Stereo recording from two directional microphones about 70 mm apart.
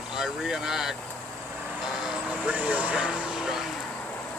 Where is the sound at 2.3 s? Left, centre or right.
Right.